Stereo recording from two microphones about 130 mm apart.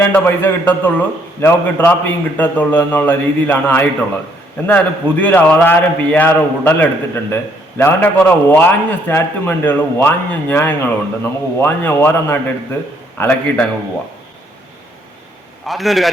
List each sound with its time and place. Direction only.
0.0 s a man's voice: 15° left (ahead or behind)
15.6 s a man's voice: centre (ahead or behind)